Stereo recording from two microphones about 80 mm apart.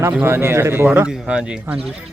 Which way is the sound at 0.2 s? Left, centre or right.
Right.